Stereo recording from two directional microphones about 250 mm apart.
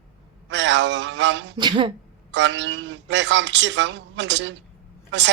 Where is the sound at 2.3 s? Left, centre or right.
Right.